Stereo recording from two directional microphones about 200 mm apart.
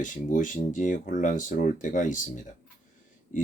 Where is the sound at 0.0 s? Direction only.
40° left (ahead or behind).